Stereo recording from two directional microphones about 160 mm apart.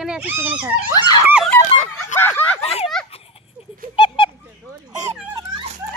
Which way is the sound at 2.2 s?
15° left (ahead or behind).